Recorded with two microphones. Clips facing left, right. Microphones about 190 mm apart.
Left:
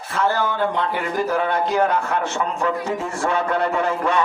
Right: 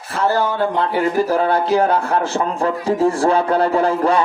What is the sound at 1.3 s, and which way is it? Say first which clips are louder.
Speech: right 4 dB; 35° right (ahead or behind).